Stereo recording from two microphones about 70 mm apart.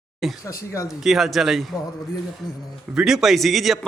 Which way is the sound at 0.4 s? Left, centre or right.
Left.